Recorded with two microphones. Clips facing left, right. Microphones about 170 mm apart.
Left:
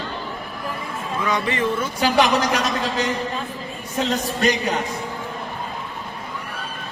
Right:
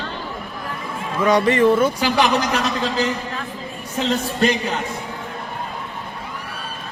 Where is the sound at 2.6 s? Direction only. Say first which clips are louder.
Right 2 dB; 30° right (ahead or behind).